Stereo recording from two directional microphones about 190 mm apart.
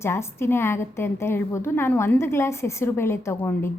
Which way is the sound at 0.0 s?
15° left (ahead or behind).